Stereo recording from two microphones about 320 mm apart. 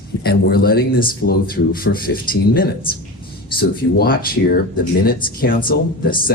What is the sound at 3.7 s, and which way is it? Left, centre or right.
Speech, left.